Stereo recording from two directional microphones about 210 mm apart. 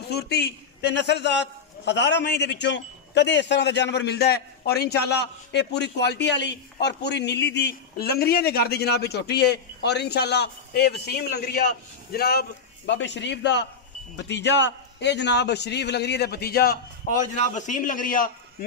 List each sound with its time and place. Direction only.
0.1 s a man's voice: 50° left (ahead or behind)